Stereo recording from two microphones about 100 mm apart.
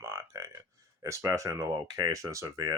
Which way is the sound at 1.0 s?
30° right (ahead or behind).